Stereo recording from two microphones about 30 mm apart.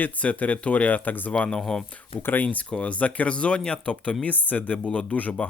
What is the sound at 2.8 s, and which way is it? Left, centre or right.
Speech, left.